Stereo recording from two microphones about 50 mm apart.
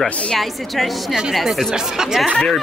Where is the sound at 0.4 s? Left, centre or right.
Centre.